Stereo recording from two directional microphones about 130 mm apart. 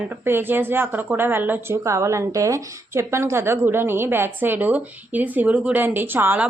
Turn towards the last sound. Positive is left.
turn(degrees=-15)  # may be behind; listen again after turning